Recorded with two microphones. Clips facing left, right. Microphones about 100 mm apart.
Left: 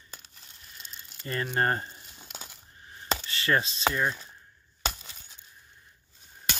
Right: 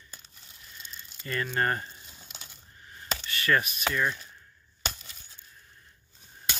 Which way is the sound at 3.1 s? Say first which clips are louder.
Even; 25° left (ahead or behind).